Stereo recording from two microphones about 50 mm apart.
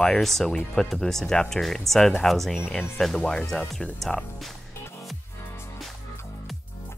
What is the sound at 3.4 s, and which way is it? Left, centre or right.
Speech, centre.